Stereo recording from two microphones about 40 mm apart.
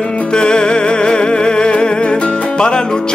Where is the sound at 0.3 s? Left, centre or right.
Left.